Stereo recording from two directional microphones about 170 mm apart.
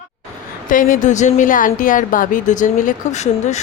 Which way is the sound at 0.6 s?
55° left (ahead or behind).